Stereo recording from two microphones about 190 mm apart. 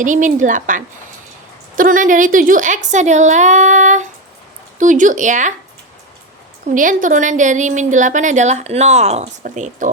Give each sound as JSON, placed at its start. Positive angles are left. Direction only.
{"t": 0.0, "sound": "a woman's voice", "side_deg": -45}
{"t": 6.7, "sound": "a woman's voice", "side_deg": -45}